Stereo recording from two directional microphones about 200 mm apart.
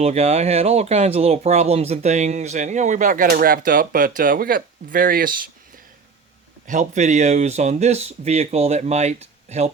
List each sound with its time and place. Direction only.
0.0 s speech: 30° right (ahead or behind)
6.7 s speech: 35° right (ahead or behind)